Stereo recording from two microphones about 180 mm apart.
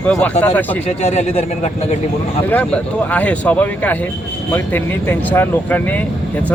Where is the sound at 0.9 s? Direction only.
40° left (ahead or behind).